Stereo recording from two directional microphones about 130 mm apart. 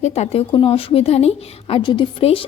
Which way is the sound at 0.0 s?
55° left (ahead or behind).